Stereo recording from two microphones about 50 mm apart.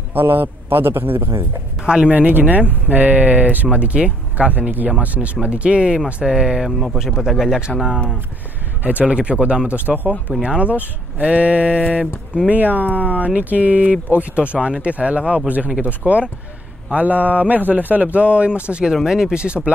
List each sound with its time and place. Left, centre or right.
0.1 s a man's voice: right
1.8 s speech: centre
2.0 s speech: right; by 7.7 s centre
9.0 s speech: right
9.8 s speech: right
10.4 s speech: right
19.4 s speech: right